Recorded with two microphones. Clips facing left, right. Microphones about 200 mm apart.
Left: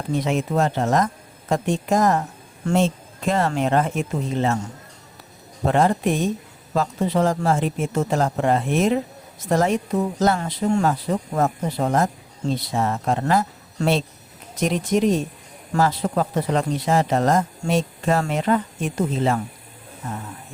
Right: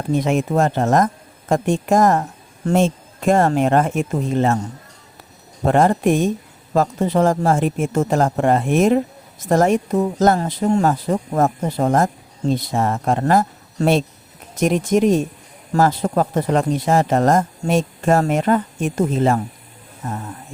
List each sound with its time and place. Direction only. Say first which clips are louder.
0.1 s speech: right 4 dB; 50° right (ahead or behind)
5.6 s speech: right 4 dB; 50° right (ahead or behind)